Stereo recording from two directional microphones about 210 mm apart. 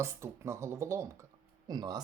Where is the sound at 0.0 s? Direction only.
15° right (ahead or behind).